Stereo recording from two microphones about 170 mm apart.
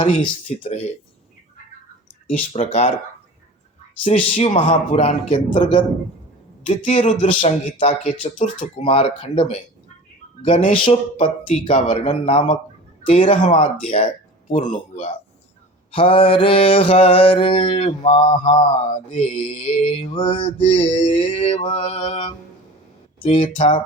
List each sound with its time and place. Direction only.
0.0 s mantra: 30° left (ahead or behind)
2.5 s speech: 45° left (ahead or behind)
4.0 s mantra: 35° left (ahead or behind)
6.7 s mantra: 40° left (ahead or behind)
15.9 s mantra: 30° left (ahead or behind)